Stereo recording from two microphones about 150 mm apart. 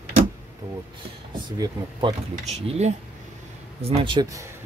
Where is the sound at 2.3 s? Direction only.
45° right (ahead or behind).